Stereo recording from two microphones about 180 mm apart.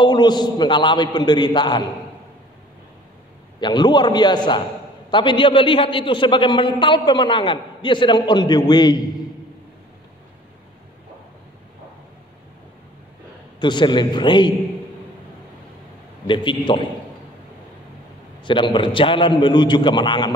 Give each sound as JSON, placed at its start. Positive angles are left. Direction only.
{"t": 0.0, "sound": "a man's voice", "side_deg": 25}
{"t": 3.5, "sound": "a man's voice", "side_deg": 25}
{"t": 13.6, "sound": "a man's voice", "side_deg": 25}
{"t": 16.3, "sound": "a man's voice", "side_deg": 25}
{"t": 18.4, "sound": "a man's voice", "side_deg": 25}